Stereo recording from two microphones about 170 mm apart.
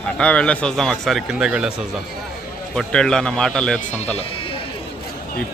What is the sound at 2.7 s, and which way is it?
Speech, 5° left (ahead or behind).